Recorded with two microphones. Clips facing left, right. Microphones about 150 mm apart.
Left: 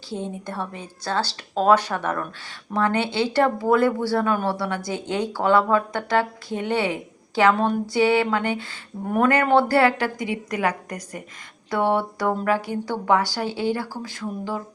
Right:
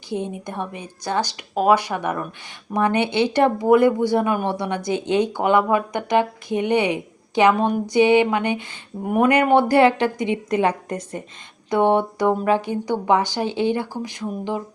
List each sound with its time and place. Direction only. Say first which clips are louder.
0.1 s a woman's voice: right 3 dB; 15° right (ahead or behind)